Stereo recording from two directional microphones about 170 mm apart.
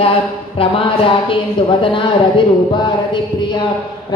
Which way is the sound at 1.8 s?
30° left (ahead or behind).